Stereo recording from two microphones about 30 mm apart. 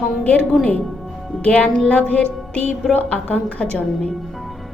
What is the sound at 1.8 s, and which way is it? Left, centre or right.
Music, left.